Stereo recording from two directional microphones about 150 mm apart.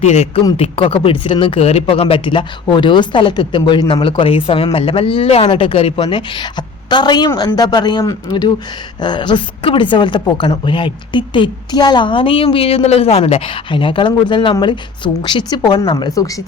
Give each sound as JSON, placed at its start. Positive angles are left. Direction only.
{"t": 0.0, "sound": "speech", "side_deg": 45}